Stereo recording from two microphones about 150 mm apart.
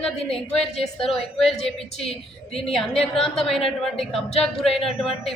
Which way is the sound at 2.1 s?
40° left (ahead or behind).